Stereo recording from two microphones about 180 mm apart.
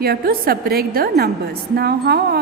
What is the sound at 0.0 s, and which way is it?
A woman's voice, 55° right (ahead or behind).